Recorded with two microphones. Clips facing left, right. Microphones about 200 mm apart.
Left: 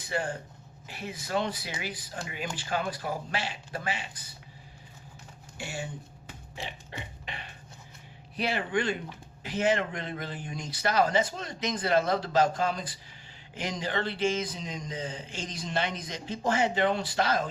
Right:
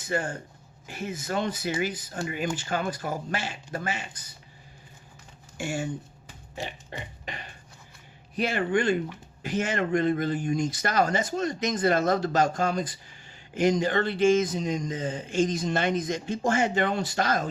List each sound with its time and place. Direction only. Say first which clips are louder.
0.0 s speech: right 3 dB; 45° right (ahead or behind)
5.5 s speech: right 7 dB; 45° right (ahead or behind)
6.9 s speech: right 3 dB; 45° right (ahead or behind)